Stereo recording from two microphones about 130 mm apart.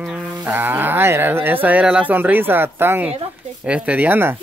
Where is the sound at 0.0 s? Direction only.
10° right (ahead or behind).